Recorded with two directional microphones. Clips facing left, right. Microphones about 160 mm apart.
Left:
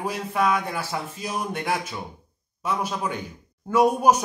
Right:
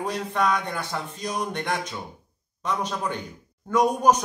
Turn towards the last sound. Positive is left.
turn(degrees=10)  # may be behind; listen again after turning